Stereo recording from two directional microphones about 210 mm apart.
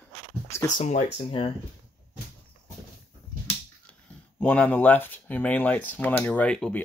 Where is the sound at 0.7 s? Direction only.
35° left (ahead or behind).